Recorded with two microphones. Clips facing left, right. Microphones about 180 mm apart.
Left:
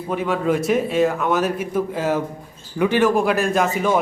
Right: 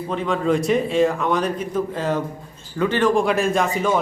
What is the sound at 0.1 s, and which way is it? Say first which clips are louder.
Speech: even; 5° left (ahead or behind).